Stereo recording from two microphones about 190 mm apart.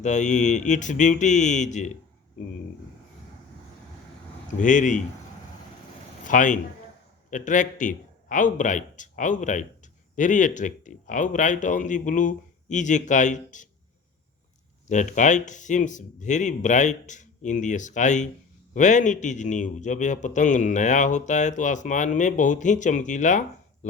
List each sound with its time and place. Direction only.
0.0 s a man's voice: 40° left (ahead or behind)
4.5 s a man's voice: 40° left (ahead or behind)
6.2 s a man's voice: 45° left (ahead or behind)
14.8 s a man's voice: 40° left (ahead or behind)